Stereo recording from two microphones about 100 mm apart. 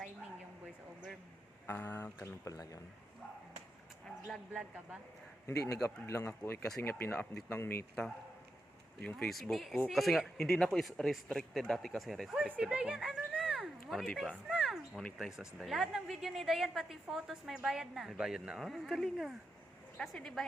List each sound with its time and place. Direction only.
1.6 s speech: 20° left (ahead or behind); by 2.8 s 35° left (ahead or behind)
4.3 s a man's voice: 5° right (ahead or behind)
5.5 s speech: 30° left (ahead or behind)
9.0 s speech: 15° left (ahead or behind)
9.3 s a woman's voice: centre (ahead or behind)
14.5 s a sound: 5° right (ahead or behind)
15.4 s a woman's voice: 5° right (ahead or behind)